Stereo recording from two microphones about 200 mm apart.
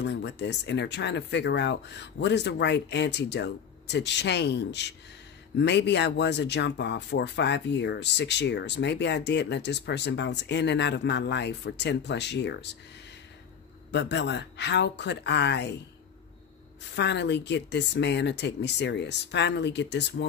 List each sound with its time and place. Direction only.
0.0 s speech: 60° left (ahead or behind)
13.9 s speech: 60° left (ahead or behind)
16.9 s speech: 60° left (ahead or behind)